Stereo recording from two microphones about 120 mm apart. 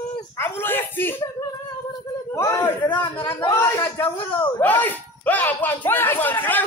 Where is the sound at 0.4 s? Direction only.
20° left (ahead or behind).